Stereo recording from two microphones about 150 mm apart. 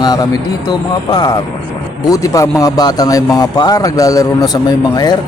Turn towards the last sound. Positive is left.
turn(degrees=25)  # may be behind; listen again after turning